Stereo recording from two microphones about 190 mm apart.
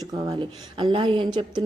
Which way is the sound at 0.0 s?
20° right (ahead or behind).